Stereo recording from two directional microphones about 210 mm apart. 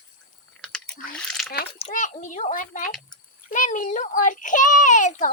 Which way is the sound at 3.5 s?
40° left (ahead or behind).